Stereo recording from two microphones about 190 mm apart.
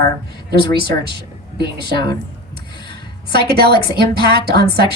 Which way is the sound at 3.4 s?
55° right (ahead or behind).